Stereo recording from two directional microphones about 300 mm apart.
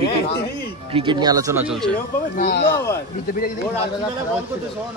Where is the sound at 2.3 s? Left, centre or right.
Left.